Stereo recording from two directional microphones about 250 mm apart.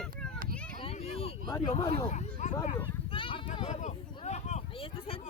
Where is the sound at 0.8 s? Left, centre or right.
Left.